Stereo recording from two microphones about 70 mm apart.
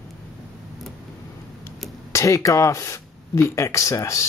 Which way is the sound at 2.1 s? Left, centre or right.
Left.